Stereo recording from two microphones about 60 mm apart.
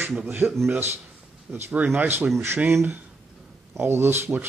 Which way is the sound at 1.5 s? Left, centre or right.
Right.